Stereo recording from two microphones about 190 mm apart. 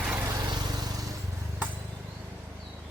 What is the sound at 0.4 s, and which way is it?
Vehicle, 20° right (ahead or behind).